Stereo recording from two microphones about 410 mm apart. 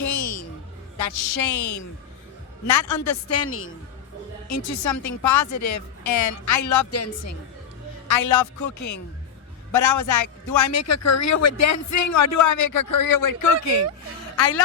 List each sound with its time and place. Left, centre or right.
0.0 s a sound: left
0.9 s a man's voice: left
2.9 s a woman's voice: left
4.6 s a man's voice: left
8.0 s a man's voice: left